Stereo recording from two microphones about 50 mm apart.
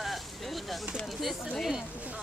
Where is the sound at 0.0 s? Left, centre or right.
Centre.